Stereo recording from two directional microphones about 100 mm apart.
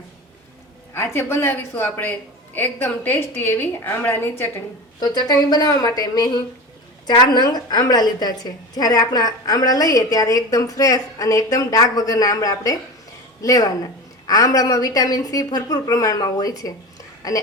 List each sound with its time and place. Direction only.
0.9 s a woman's voice: 25° left (ahead or behind)
4.9 s a woman's voice: 40° left (ahead or behind)